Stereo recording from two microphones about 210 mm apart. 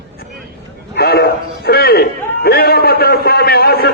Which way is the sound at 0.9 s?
50° left (ahead or behind).